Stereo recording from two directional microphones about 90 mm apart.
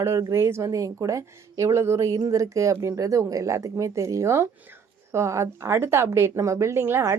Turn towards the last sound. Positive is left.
turn(degrees=-30)  # may be behind; listen again after turning